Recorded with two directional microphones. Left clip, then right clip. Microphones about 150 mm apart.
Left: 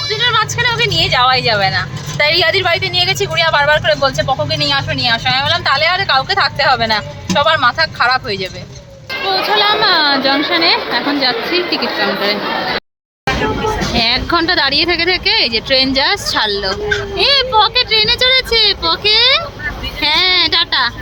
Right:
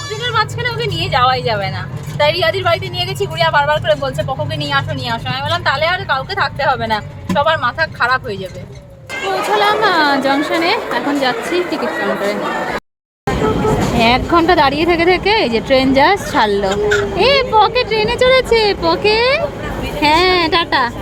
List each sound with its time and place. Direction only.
0.2 s speech: centre (ahead or behind)
9.3 s a woman's voice: 10° right (ahead or behind)
13.9 s speech: 15° right (ahead or behind); by 20.9 s 35° right (ahead or behind)